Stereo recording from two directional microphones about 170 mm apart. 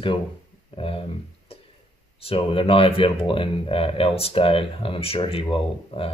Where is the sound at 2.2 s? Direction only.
35° left (ahead or behind).